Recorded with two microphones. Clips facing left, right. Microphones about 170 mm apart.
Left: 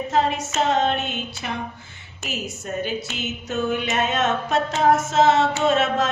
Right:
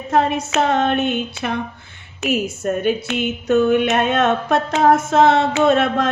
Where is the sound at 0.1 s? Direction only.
60° right (ahead or behind).